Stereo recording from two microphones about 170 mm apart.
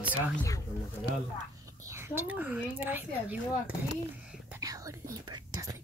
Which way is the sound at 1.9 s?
15° right (ahead or behind).